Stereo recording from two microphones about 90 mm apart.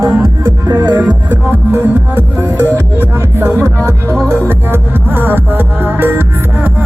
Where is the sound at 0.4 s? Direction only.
25° right (ahead or behind).